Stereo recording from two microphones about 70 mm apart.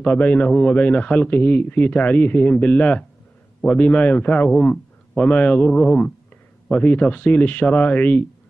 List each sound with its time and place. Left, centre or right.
0.0 s a man's voice: left